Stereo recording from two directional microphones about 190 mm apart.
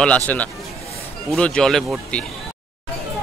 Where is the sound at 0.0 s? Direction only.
10° left (ahead or behind).